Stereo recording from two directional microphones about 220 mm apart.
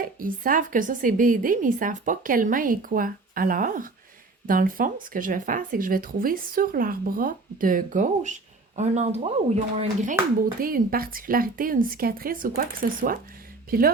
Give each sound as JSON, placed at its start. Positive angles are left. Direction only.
{"t": 0.2, "sound": "speech", "side_deg": -40}
{"t": 10.6, "sound": "speech", "side_deg": -40}